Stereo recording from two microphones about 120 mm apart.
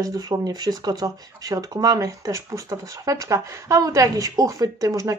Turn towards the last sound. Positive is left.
turn(degrees=-25)  # may be behind; listen again after turning